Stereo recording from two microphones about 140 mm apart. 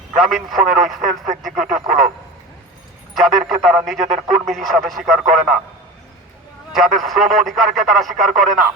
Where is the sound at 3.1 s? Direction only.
Centre (ahead or behind).